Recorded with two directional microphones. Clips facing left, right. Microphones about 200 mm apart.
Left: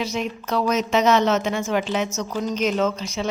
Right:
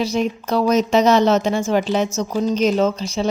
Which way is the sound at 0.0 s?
35° right (ahead or behind).